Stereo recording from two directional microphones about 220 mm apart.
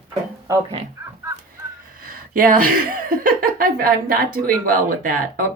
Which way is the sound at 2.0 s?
40° right (ahead or behind).